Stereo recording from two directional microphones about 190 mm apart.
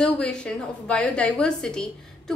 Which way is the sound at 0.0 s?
5° left (ahead or behind).